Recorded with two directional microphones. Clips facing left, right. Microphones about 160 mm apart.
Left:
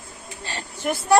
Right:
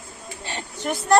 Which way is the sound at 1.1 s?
10° left (ahead or behind).